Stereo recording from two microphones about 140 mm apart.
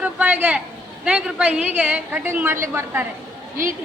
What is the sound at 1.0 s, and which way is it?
A woman's voice, 10° right (ahead or behind).